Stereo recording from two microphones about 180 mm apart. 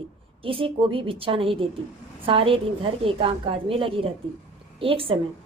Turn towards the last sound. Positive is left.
turn(degrees=-30)  # may be behind; listen again after turning